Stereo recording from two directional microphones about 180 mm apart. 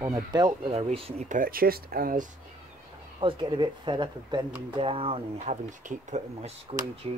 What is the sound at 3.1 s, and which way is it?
Speech, 25° right (ahead or behind).